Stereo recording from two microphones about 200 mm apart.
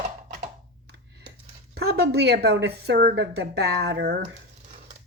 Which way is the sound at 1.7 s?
50° right (ahead or behind).